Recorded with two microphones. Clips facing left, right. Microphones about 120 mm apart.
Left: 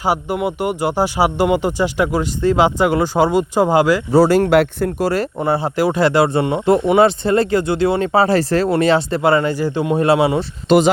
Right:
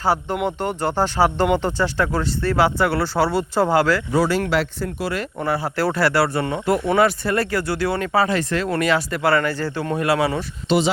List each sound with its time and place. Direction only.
0.0 s speech: 15° left (ahead or behind)
4.1 s speech: 40° left (ahead or behind)
5.4 s speech: 25° left (ahead or behind)
10.7 s speech: 50° left (ahead or behind)